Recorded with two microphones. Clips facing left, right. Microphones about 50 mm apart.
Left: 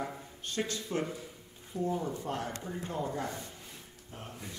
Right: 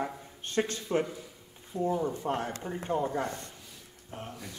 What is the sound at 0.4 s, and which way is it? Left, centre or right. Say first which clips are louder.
Speech: right 5 dB; right.